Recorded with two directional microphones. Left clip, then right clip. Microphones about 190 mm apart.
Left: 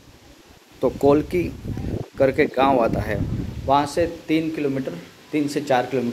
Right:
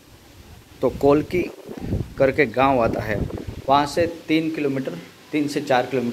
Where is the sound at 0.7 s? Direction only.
5° left (ahead or behind).